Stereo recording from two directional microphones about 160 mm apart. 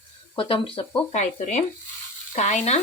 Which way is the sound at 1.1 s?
50° left (ahead or behind).